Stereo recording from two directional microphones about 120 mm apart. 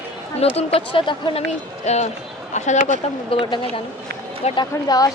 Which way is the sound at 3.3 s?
45° left (ahead or behind).